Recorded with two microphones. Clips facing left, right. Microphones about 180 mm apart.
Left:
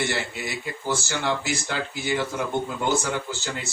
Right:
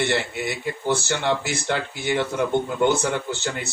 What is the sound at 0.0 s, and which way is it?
Speech, 60° right (ahead or behind).